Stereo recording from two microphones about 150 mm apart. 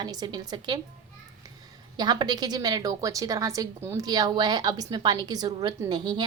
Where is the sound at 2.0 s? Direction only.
30° right (ahead or behind).